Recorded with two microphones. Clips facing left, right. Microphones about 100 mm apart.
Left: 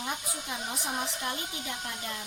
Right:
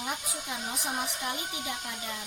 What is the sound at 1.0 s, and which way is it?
Speech, 15° right (ahead or behind).